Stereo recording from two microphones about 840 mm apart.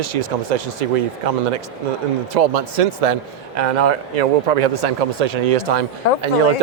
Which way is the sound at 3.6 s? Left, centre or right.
Right.